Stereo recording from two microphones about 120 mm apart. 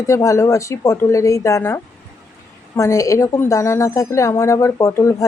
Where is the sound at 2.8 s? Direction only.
25° left (ahead or behind).